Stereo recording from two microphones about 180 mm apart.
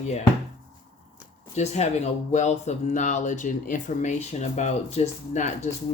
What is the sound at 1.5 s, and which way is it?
Speech, 40° left (ahead or behind).